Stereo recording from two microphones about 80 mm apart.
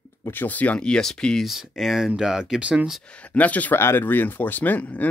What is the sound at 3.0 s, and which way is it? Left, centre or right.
Speech, centre.